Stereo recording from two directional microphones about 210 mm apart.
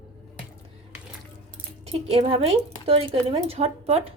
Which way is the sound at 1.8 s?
30° right (ahead or behind).